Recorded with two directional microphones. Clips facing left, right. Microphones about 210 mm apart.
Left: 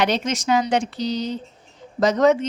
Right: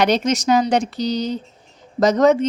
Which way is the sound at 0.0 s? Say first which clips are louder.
Right 4 dB; 40° right (ahead or behind).